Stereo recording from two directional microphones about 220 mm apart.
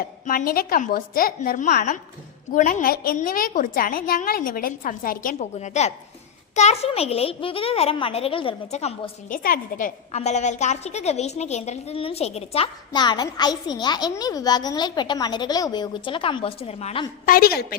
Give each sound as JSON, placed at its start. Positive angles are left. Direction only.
{"t": 0.0, "sound": "a woman's voice", "side_deg": 40}
{"t": 9.4, "sound": "a woman's voice", "side_deg": 40}
{"t": 17.2, "sound": "a woman's voice", "side_deg": 45}